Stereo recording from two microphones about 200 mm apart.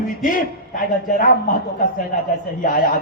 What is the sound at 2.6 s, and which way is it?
Speech, 40° left (ahead or behind).